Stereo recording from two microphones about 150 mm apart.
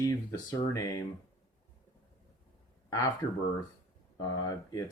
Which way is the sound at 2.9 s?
25° left (ahead or behind).